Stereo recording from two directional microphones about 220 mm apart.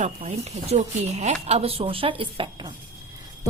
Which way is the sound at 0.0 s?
30° right (ahead or behind).